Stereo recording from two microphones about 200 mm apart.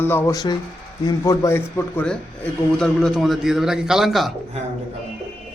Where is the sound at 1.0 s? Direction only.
15° left (ahead or behind); by 4.3 s centre (ahead or behind).